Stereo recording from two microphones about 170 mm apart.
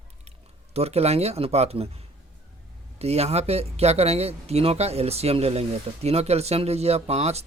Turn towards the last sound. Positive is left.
turn(degrees=-40)  # may be behind; listen again after turning